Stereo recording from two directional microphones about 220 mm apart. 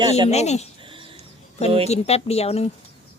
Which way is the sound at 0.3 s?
30° left (ahead or behind).